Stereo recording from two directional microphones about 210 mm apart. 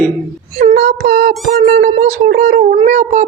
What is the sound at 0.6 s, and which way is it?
Speech, 35° right (ahead or behind).